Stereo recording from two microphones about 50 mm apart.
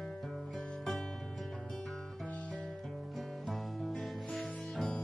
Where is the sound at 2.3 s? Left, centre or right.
Left.